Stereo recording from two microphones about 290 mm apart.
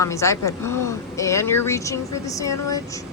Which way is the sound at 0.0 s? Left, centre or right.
Centre.